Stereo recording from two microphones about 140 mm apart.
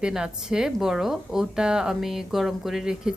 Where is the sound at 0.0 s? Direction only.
5° right (ahead or behind).